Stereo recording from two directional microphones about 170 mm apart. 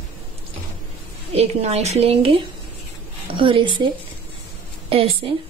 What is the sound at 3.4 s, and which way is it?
Speech, 30° right (ahead or behind).